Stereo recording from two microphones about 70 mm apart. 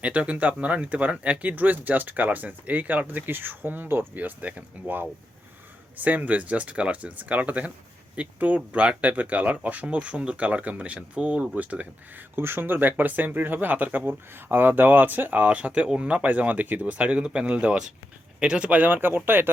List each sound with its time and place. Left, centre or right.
0.0 s speech: centre
12.4 s speech: right